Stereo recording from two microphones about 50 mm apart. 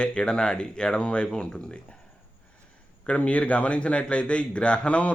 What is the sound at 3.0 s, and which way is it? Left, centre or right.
A man's voice, left.